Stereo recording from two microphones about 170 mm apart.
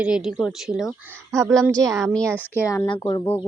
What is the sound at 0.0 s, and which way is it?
Speech, 5° right (ahead or behind).